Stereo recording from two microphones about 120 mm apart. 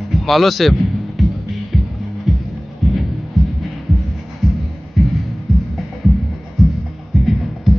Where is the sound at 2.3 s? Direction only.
Centre (ahead or behind).